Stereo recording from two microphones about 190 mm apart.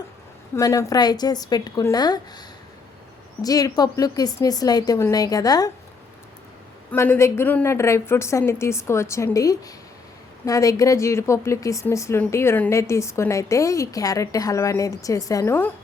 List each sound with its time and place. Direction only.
0.5 s a woman's voice: 15° left (ahead or behind)
3.4 s a woman's voice: 20° left (ahead or behind)
6.9 s speech: 10° left (ahead or behind)